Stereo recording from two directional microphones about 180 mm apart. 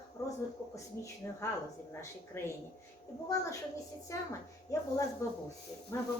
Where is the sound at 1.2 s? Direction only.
20° left (ahead or behind).